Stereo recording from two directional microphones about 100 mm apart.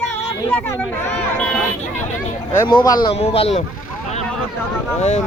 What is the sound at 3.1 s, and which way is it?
Speech, 85° left.